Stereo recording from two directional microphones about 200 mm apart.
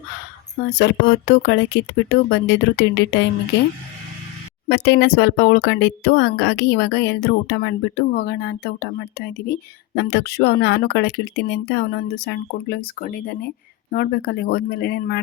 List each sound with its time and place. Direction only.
0.7 s speech: 55° left (ahead or behind)
4.7 s speech: 60° left (ahead or behind)